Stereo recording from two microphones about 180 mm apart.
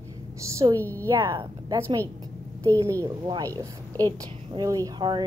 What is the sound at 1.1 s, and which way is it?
A woman's voice, 25° right (ahead or behind).